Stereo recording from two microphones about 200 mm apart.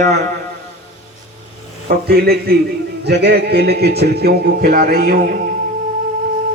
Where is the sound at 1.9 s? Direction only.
50° right (ahead or behind).